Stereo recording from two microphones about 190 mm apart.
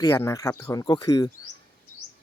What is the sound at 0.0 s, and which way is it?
Speech, 15° left (ahead or behind).